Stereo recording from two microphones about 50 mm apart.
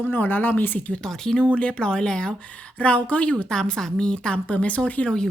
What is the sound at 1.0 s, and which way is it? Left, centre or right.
A woman's voice, centre.